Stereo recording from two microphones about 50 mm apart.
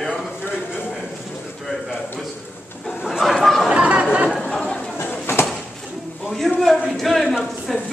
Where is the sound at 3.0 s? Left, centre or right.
Centre.